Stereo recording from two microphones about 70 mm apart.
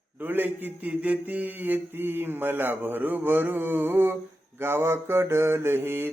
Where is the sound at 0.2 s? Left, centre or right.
Right.